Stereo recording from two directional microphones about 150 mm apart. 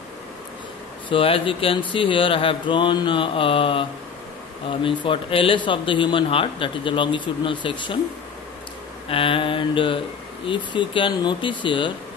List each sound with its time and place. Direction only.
1.0 s speech: 35° left (ahead or behind)
9.1 s speech: 35° left (ahead or behind)